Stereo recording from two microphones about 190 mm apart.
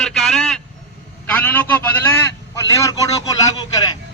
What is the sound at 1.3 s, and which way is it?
A man's voice, 10° left (ahead or behind).